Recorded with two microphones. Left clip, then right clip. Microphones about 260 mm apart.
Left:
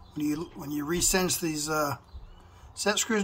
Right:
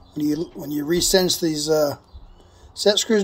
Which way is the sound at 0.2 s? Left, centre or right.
Left.